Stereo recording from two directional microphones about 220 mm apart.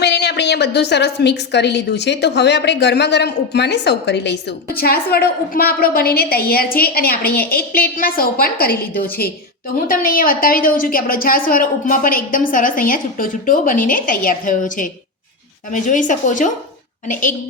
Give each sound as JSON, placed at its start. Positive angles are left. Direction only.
{"t": 0.0, "sound": "a woman's voice", "side_deg": 50}